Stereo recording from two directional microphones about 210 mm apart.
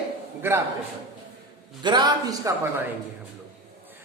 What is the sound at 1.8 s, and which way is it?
A man's voice, 20° right (ahead or behind).